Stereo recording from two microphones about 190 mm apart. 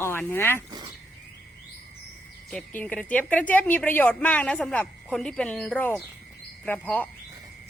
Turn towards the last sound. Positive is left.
turn(degrees=10)  # may be behind; listen again after turning